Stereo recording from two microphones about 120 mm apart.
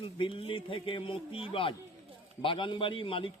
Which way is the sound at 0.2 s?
45° left (ahead or behind).